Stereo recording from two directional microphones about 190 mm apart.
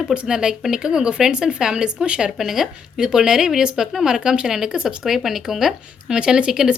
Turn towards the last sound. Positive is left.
turn(degrees=-5)  # may be behind; listen again after turning